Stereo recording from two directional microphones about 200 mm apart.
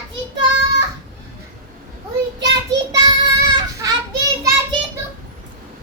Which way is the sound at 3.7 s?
15° right (ahead or behind).